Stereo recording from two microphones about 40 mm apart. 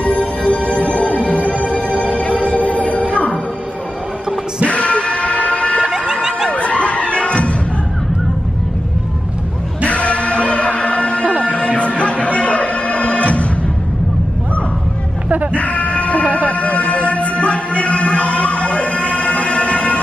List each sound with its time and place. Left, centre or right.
0.0 s music: left
4.6 s music: left
9.8 s music: left
15.5 s a sound: left
16.3 s music: left